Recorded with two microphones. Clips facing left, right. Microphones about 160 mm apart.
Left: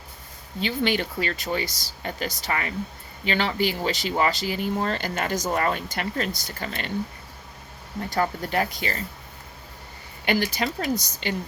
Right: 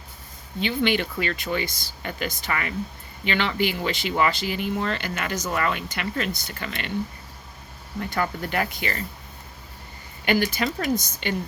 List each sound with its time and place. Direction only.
0.6 s speech: 40° left (ahead or behind)
8.1 s speech: 40° left (ahead or behind)
10.2 s speech: 35° left (ahead or behind)